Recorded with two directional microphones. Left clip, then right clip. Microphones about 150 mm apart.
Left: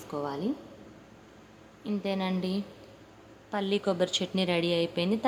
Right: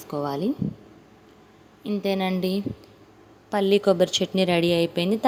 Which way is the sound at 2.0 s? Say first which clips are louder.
Right 7 dB; 40° right (ahead or behind).